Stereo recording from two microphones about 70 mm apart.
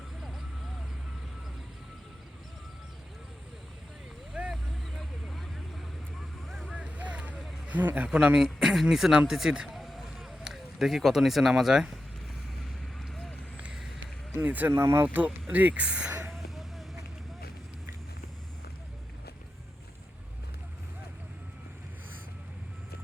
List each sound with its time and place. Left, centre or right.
0.2 s vehicle: centre
4.4 s vehicle: centre
4.9 s vehicle: centre
6.5 s vehicle: centre
6.7 s vehicle: centre
7.7 s speech: right
8.1 s a man's voice: centre
13.0 s vehicle: centre
14.4 s speech: right
14.8 s speech: right
15.0 s speech: right